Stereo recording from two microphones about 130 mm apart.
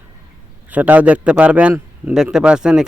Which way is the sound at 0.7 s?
10° right (ahead or behind).